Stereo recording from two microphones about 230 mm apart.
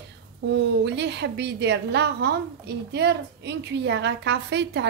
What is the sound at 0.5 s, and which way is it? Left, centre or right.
A woman's voice, right.